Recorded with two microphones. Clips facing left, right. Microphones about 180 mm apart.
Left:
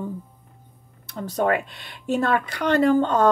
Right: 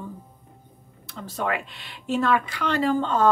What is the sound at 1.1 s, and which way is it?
A woman's voice, 45° left (ahead or behind).